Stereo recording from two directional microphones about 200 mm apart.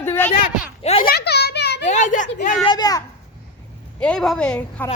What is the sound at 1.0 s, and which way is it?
Children playing, 55° left (ahead or behind).